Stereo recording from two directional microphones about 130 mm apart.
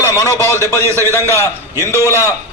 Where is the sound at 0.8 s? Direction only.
20° right (ahead or behind).